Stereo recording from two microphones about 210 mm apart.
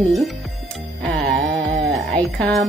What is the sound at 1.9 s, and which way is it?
Speech, 5° left (ahead or behind).